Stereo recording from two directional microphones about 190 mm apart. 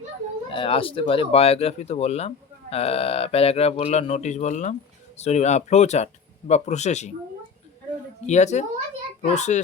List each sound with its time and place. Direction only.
0.5 s speech: 30° left (ahead or behind)
8.3 s speech: 40° left (ahead or behind)